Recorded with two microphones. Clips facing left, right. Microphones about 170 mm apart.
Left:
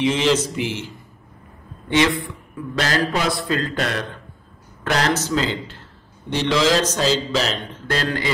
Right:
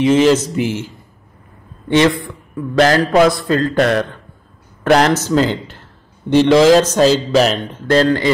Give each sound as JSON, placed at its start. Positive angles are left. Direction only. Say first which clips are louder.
{"t": 0.0, "sound": "speech", "louder": "right 7 dB", "side_deg": -45}
{"t": 2.8, "sound": "speech", "louder": "right 10 dB", "side_deg": -50}